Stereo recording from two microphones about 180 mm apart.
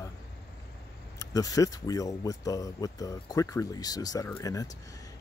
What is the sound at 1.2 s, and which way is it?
Speech, 20° left (ahead or behind).